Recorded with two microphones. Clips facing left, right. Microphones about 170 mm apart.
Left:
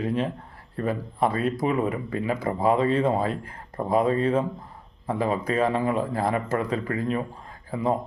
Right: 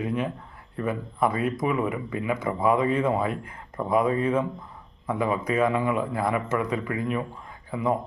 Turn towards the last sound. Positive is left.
turn(degrees=30)  # may be behind; listen again after turning